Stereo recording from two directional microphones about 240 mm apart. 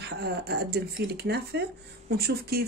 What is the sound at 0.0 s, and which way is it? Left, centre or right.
A woman's voice, right.